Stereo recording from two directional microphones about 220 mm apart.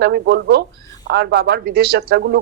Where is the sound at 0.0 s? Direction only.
50° right (ahead or behind).